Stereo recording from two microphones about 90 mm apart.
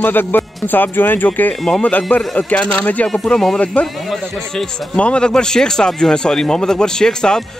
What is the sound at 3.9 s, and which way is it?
A man's voice, centre (ahead or behind).